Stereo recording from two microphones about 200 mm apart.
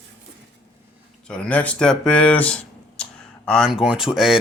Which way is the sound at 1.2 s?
5° left (ahead or behind).